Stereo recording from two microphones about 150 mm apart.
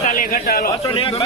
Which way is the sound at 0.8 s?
35° left (ahead or behind).